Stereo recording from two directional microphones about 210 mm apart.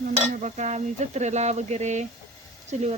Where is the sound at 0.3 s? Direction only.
35° right (ahead or behind).